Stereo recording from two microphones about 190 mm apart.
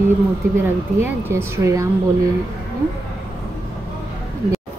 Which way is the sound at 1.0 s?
15° right (ahead or behind).